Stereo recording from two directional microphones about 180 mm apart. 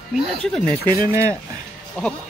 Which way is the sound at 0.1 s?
Centre (ahead or behind).